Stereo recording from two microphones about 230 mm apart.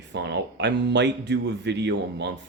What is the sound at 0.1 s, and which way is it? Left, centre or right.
Speech, right.